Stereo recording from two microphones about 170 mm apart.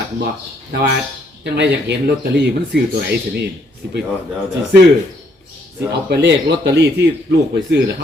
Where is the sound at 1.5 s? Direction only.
80° right.